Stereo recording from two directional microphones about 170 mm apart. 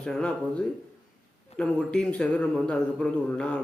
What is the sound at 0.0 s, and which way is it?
Speech, 5° left (ahead or behind).